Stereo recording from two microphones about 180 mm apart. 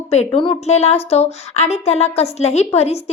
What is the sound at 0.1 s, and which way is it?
A woman's voice, 35° left (ahead or behind).